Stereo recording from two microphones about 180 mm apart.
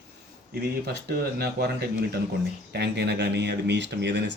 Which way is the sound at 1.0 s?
65° right (ahead or behind).